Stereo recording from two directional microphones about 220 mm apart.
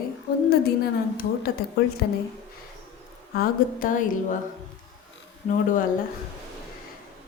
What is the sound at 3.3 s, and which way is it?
Speech, 40° left (ahead or behind).